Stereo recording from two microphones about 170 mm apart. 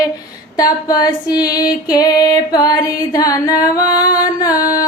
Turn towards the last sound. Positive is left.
turn(degrees=20)  # may be behind; listen again after turning